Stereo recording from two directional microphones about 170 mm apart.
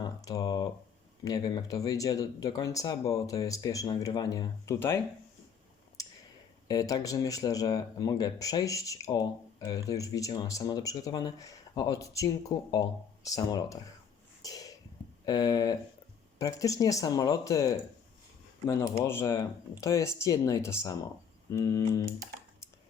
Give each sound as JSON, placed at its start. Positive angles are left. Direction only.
{"t": 0.0, "sound": "speech", "side_deg": 20}
{"t": 6.7, "sound": "speech", "side_deg": 20}
{"t": 14.4, "sound": "a sound", "side_deg": 20}
{"t": 15.3, "sound": "speech", "side_deg": 25}